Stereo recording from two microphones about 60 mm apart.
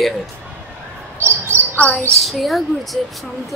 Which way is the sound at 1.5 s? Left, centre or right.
Right.